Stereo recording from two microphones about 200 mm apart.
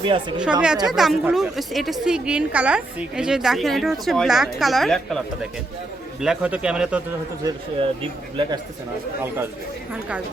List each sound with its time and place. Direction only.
0.0 s speech: 25° right (ahead or behind)
0.9 s a woman's voice: centre (ahead or behind)
7.4 s speech: 25° right (ahead or behind)